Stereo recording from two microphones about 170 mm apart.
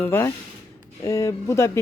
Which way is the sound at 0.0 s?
15° left (ahead or behind).